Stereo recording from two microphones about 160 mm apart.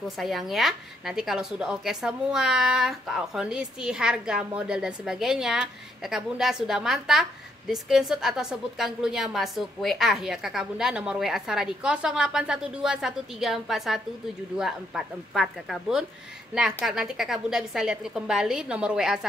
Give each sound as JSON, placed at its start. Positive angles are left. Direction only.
{"t": 0.2, "sound": "a woman's voice", "side_deg": 0}